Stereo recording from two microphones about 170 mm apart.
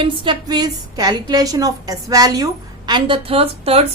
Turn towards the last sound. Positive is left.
turn(degrees=-35)  # may be behind; listen again after turning